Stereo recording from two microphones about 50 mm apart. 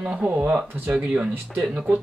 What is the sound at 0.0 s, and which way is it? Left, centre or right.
Speech, right.